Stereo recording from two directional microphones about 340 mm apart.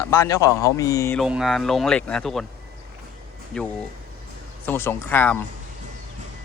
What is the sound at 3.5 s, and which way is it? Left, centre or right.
Speech, centre.